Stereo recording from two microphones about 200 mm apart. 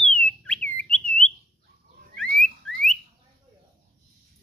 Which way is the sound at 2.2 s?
40° right (ahead or behind).